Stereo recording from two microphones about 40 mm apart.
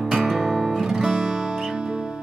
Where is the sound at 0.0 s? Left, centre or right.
Centre.